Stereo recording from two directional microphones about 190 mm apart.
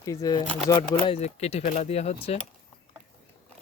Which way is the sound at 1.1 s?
35° left (ahead or behind).